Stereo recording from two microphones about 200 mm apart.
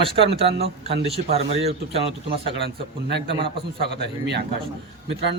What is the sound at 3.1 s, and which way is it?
A man's voice, 60° right (ahead or behind).